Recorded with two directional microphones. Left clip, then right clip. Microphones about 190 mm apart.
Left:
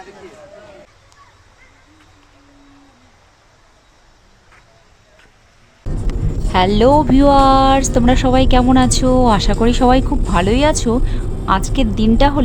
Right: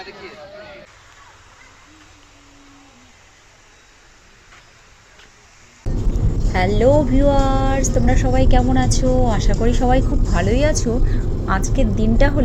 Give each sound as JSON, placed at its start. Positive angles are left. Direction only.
{"t": 6.5, "sound": "a woman's voice", "side_deg": 20}